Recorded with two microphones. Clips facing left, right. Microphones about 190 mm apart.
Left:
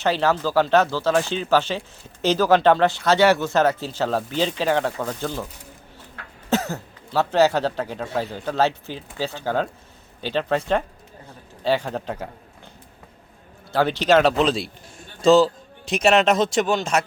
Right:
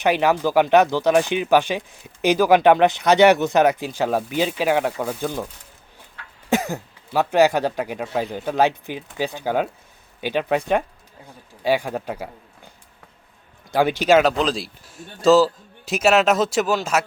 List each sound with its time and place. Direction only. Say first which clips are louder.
0.0 s speech: right 2 dB; 15° right (ahead or behind)
6.5 s speech: right 1 dB; 15° right (ahead or behind)
13.7 s a man's voice: right 2 dB; 10° right (ahead or behind)